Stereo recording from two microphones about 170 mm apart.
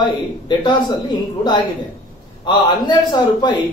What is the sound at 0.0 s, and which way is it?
Speech, 25° left (ahead or behind).